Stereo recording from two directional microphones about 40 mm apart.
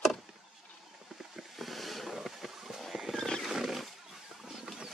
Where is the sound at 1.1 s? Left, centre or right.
Centre.